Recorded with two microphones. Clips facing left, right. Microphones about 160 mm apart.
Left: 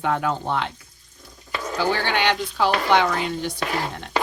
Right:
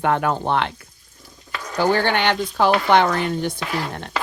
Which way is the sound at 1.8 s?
50° right (ahead or behind).